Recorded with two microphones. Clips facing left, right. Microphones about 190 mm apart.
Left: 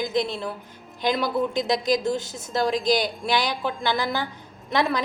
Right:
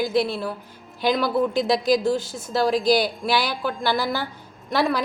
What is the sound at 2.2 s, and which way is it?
Speech, 20° left (ahead or behind).